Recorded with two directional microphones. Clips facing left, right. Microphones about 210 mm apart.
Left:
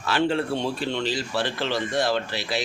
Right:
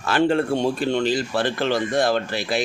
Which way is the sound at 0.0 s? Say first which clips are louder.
Right 4 dB; 50° right (ahead or behind).